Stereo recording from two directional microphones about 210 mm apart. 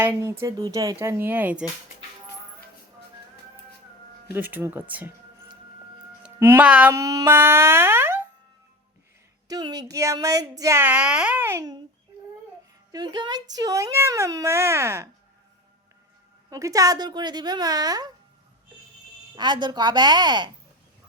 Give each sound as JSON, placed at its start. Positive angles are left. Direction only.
{"t": 0.0, "sound": "speech", "side_deg": -10}
{"t": 4.3, "sound": "speech", "side_deg": -10}
{"t": 6.2, "sound": "a sound", "side_deg": -10}
{"t": 9.5, "sound": "speech", "side_deg": -20}
{"t": 12.9, "sound": "speech", "side_deg": -20}
{"t": 16.5, "sound": "speech", "side_deg": -15}
{"t": 19.4, "sound": "speech", "side_deg": -20}